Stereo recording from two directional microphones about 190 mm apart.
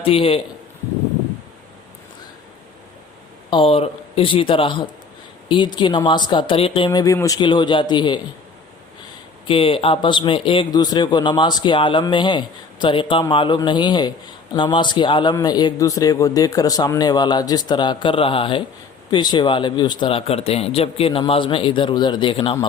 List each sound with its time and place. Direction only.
0.0 s a man's voice: 30° left (ahead or behind)
3.5 s a man's voice: 30° left (ahead or behind)
9.5 s a man's voice: 30° left (ahead or behind)